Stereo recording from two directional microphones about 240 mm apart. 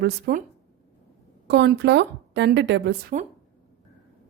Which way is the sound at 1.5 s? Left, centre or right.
Right.